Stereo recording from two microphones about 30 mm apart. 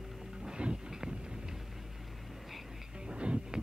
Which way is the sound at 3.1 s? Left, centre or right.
Right.